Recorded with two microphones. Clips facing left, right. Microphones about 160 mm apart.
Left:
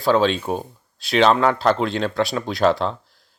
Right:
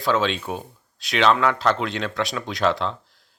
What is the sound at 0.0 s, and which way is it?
Speech, 35° left (ahead or behind).